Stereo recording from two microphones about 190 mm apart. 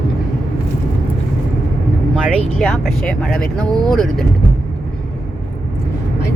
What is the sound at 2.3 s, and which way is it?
Speech, centre (ahead or behind).